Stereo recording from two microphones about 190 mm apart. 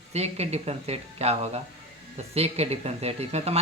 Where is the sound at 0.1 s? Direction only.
35° right (ahead or behind).